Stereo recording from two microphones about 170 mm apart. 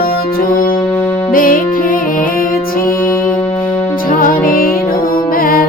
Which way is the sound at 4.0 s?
55° left (ahead or behind).